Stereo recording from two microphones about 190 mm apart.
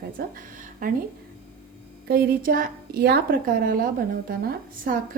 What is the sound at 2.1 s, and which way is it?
A woman's voice, 50° right (ahead or behind).